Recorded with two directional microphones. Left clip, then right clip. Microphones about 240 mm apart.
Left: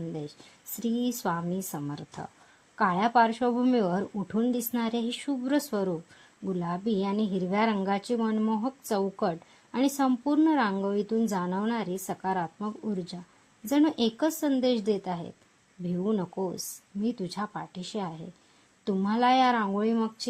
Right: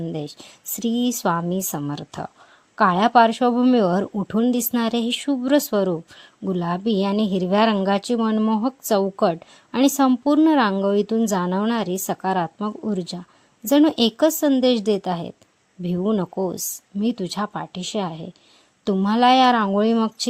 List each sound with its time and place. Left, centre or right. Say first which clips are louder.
0.1 s speech: right 8 dB; right